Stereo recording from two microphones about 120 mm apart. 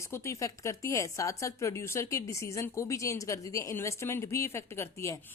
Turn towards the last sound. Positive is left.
turn(degrees=20)  # may be behind; listen again after turning